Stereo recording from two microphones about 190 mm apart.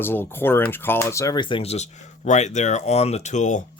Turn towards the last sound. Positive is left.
turn(degrees=40)  # may be behind; listen again after turning